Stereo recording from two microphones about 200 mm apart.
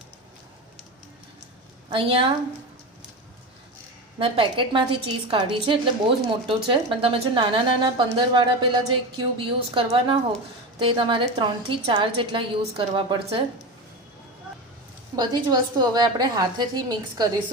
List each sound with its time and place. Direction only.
1.9 s a woman's voice: 25° right (ahead or behind)
4.2 s a woman's voice: 25° right (ahead or behind)
15.1 s a woman's voice: 20° right (ahead or behind)